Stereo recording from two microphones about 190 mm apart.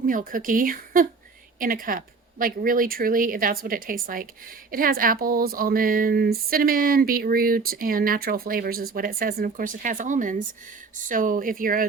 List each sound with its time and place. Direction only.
0.0 s speech: 45° right (ahead or behind)